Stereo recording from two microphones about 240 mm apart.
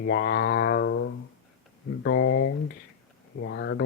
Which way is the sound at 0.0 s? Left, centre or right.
Left.